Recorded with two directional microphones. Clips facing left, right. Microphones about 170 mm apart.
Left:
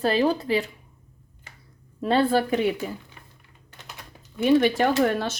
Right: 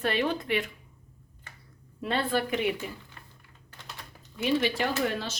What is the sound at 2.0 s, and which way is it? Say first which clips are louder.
Speech: left 7 dB; 35° left (ahead or behind).